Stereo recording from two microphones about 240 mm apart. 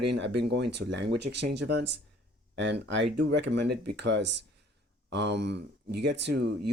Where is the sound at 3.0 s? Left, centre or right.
Right.